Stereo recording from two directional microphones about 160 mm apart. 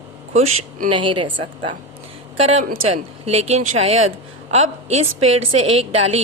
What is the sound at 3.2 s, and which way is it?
A woman's voice, 40° right (ahead or behind).